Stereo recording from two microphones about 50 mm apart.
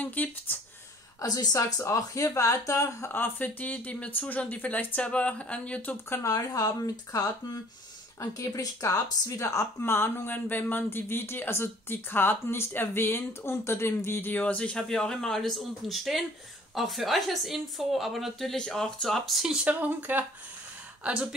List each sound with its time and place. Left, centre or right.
0.0 s speech: left
1.5 s speech: left
3.1 s speech: left
6.0 s speech: left
8.2 s speech: left
9.8 s speech: left
14.3 s speech: left
14.8 s a woman's voice: centre
18.7 s speech: centre
19.6 s speech: right
21.0 s speech: centre